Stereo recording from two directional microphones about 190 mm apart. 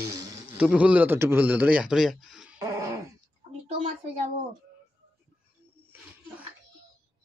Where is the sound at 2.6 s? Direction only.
15° right (ahead or behind).